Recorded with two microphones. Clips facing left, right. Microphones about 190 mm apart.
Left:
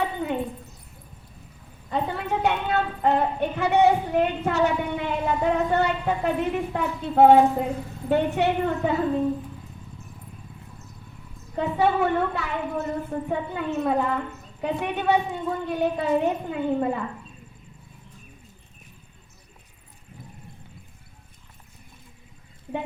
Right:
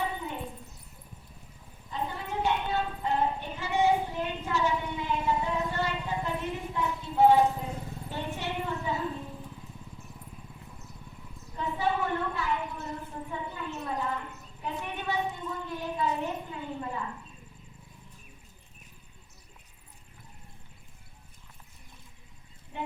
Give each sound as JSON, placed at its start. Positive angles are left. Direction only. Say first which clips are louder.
{"t": 0.0, "sound": "a sound", "louder": "left 7 dB", "side_deg": 70}
{"t": 1.9, "sound": "a woman's voice", "louder": "left 8 dB", "side_deg": 70}
{"t": 11.5, "sound": "a woman's voice", "louder": "left 8 dB", "side_deg": 70}